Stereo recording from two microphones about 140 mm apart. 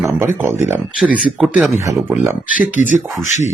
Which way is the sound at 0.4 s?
15° right (ahead or behind).